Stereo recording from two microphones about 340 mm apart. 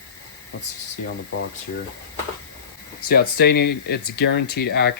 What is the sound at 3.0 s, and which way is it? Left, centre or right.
Speech, left.